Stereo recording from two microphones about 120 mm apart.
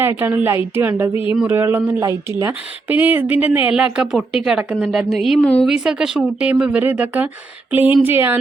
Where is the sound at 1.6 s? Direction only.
20° right (ahead or behind).